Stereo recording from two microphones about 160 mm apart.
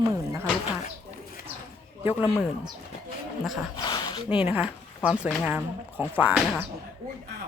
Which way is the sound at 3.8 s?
25° left (ahead or behind).